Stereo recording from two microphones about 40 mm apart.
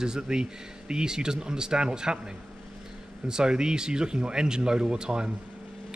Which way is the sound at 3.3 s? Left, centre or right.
Centre.